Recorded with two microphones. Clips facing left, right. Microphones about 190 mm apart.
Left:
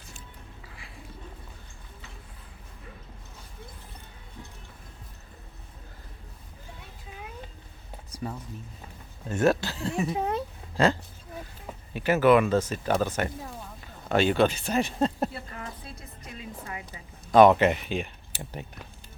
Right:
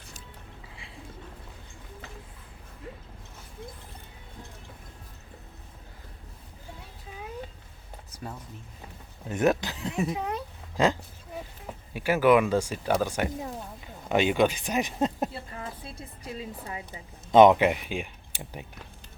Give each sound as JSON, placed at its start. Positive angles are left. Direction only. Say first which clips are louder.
{"t": 8.1, "sound": "a sound", "louder": "left 5 dB", "side_deg": 10}
{"t": 9.3, "sound": "speech", "louder": "left 1 dB", "side_deg": -15}
{"t": 10.1, "sound": "speech", "louder": "left 3 dB", "side_deg": 30}
{"t": 10.8, "sound": "speech", "louder": "left 1 dB", "side_deg": -15}
{"t": 11.9, "sound": "speech", "louder": "left 1 dB", "side_deg": -10}
{"t": 15.3, "sound": "a woman's voice", "louder": "right 1 dB", "side_deg": -25}